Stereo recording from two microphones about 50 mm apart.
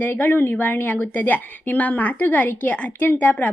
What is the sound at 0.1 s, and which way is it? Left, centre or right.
Speech, left.